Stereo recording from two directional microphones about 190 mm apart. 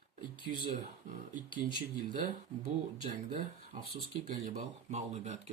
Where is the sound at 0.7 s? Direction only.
45° right (ahead or behind).